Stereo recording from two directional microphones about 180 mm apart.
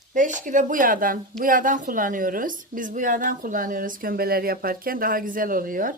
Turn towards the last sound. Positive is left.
turn(degrees=-50)  # may be behind; listen again after turning